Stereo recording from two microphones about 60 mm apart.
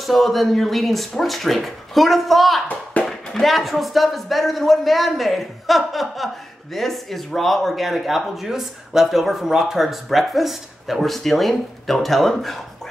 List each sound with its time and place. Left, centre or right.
0.0 s speech: centre
2.7 s a sound: left
3.1 s speech: centre